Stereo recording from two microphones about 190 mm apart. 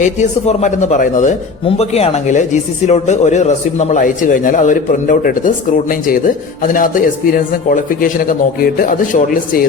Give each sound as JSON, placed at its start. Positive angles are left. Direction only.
{"t": 0.0, "sound": "a man's voice", "side_deg": 35}